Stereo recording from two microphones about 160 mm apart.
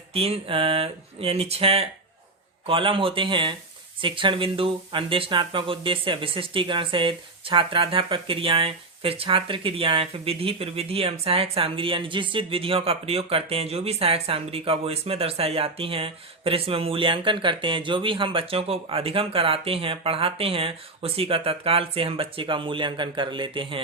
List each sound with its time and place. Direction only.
0.1 s speech: 40° right (ahead or behind)